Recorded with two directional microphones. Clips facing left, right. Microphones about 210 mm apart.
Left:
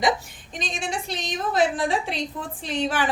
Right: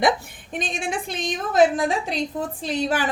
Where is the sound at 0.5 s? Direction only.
55° right (ahead or behind).